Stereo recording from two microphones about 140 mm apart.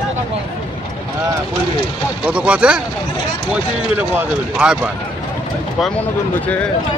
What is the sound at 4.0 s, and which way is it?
Speech, 10° right (ahead or behind).